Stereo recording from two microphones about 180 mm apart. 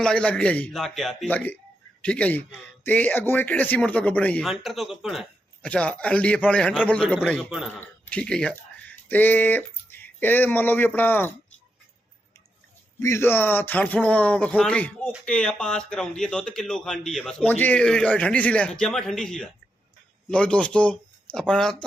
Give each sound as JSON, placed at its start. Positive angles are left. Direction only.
{"t": 0.0, "sound": "speech", "side_deg": 5}
{"t": 13.0, "sound": "speech", "side_deg": 15}